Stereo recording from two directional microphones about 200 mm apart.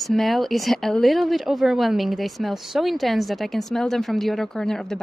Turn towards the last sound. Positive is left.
turn(degrees=0)  # may be behind; listen again after turning